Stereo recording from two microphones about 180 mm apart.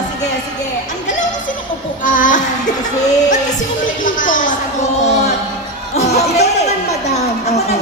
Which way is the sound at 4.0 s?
50° left (ahead or behind).